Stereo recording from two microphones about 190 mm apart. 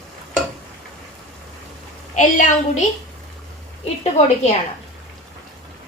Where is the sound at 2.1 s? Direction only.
40° left (ahead or behind).